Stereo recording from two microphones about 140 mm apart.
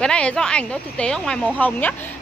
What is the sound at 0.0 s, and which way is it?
A woman's voice, 5° left (ahead or behind).